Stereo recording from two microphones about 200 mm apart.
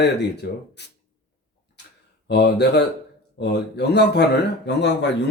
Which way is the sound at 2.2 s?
55° left (ahead or behind).